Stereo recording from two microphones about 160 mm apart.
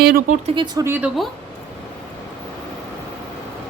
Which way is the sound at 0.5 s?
25° right (ahead or behind).